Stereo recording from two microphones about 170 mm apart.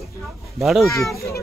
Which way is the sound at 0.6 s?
Centre (ahead or behind).